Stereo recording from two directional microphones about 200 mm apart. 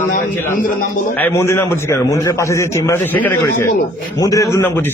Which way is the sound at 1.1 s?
10° left (ahead or behind).